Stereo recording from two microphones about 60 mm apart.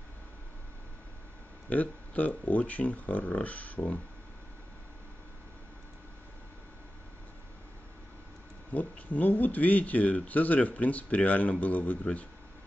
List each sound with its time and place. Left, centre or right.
1.7 s speech: left
8.7 s speech: left